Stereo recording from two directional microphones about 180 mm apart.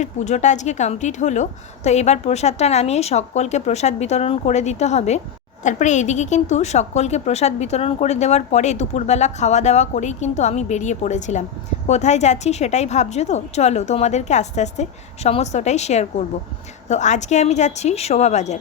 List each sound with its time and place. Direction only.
0.0 s a woman's voice: 40° left (ahead or behind)